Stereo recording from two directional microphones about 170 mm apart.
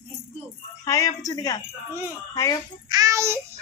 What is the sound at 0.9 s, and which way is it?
Speech, 20° left (ahead or behind).